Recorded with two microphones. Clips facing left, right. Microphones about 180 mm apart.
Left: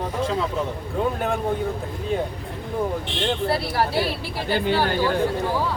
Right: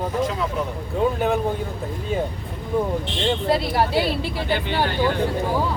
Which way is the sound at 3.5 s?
20° right (ahead or behind).